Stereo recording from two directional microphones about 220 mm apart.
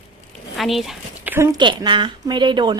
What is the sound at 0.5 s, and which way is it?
A woman's voice, centre (ahead or behind).